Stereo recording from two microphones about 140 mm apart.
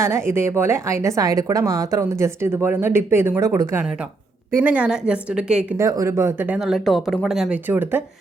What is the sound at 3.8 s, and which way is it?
A woman's voice, 5° right (ahead or behind).